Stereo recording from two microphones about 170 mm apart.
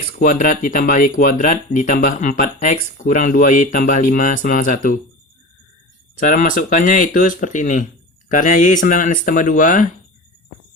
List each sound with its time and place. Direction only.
0.0 s speech: 50° left (ahead or behind)
6.1 s speech: 50° left (ahead or behind)